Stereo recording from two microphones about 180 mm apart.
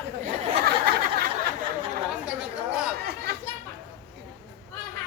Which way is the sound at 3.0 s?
60° right (ahead or behind).